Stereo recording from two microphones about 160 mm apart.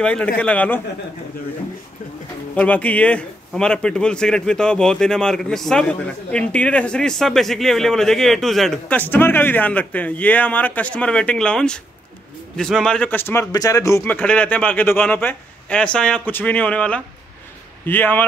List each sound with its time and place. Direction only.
0.0 s a man's voice: 5° left (ahead or behind)
2.5 s a man's voice: 10° left (ahead or behind)